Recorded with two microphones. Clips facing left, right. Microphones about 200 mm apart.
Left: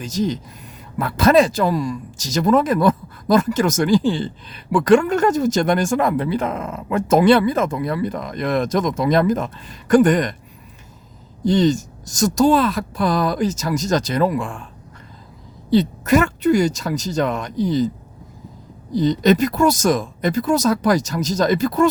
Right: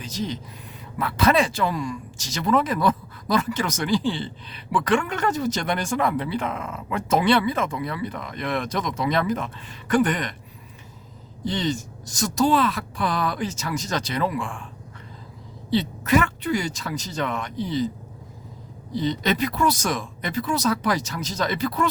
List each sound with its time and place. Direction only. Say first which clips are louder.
0.0 s speech: left 8 dB; 45° left (ahead or behind)
11.4 s speech: left 9 dB; 45° left (ahead or behind)
15.7 s speech: left 5 dB; 45° left (ahead or behind)
18.9 s speech: left 8 dB; 45° left (ahead or behind)